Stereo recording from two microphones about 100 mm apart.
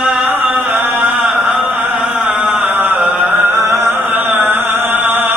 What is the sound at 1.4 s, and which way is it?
Music, 20° right (ahead or behind).